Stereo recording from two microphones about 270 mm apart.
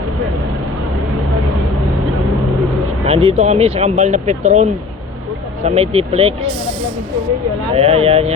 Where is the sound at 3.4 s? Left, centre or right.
Right.